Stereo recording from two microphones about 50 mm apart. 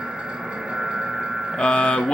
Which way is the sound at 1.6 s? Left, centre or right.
Left.